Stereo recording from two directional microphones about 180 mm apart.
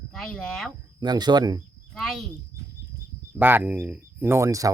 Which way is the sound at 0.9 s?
25° right (ahead or behind).